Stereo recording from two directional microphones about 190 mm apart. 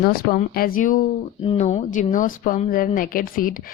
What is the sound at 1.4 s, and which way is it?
A woman's voice, 35° left (ahead or behind).